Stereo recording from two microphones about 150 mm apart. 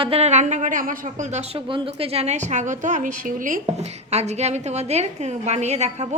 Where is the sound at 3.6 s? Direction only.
45° right (ahead or behind).